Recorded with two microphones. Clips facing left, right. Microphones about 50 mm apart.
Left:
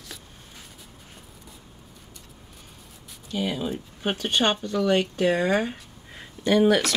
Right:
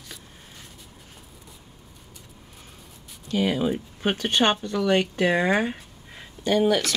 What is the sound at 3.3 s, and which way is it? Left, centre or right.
Speech, right.